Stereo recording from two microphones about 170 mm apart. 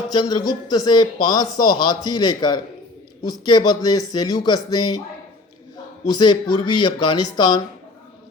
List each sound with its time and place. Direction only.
0.1 s speech: 25° left (ahead or behind)
6.1 s speech: 25° left (ahead or behind)